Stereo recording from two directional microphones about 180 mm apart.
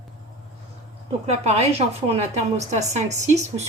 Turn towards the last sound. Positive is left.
turn(degrees=-40)  # may be behind; listen again after turning